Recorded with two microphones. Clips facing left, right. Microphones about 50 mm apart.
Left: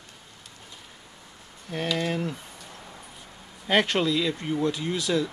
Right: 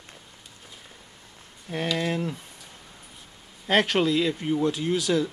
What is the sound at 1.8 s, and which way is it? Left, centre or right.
Speech, centre.